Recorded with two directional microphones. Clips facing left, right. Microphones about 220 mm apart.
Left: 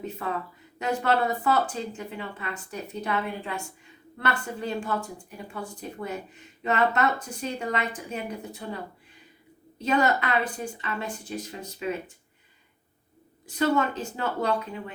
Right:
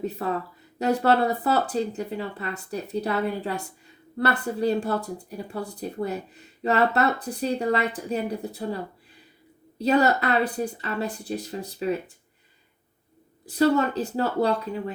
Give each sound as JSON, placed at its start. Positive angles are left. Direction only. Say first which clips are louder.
{"t": 0.0, "sound": "speech", "louder": "right 4 dB", "side_deg": -35}
{"t": 13.4, "sound": "speech", "louder": "right 4 dB", "side_deg": -35}